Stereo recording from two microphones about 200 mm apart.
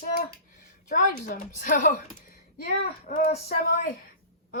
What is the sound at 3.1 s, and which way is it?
Speech, 45° left (ahead or behind).